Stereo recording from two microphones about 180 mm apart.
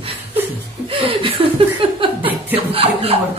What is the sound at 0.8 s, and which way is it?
Speech, 30° right (ahead or behind).